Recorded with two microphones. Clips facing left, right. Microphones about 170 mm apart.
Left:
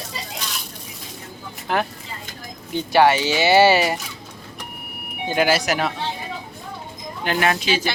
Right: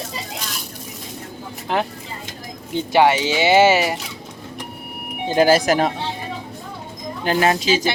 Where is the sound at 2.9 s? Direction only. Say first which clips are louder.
Even; 15° right (ahead or behind).